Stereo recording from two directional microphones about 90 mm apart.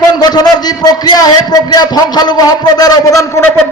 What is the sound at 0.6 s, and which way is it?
A man's voice, 50° left (ahead or behind).